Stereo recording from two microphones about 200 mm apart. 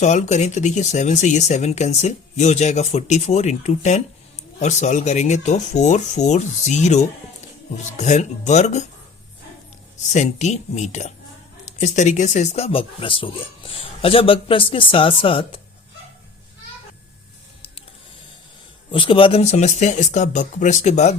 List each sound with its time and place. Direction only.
0.0 s speech: 35° left (ahead or behind)
10.1 s speech: 35° left (ahead or behind)
18.9 s speech: 25° left (ahead or behind)